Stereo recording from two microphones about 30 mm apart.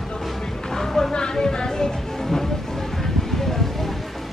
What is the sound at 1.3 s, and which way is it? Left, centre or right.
Music, left.